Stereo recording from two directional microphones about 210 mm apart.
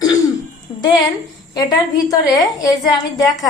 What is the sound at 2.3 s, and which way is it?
A woman's voice, 15° left (ahead or behind).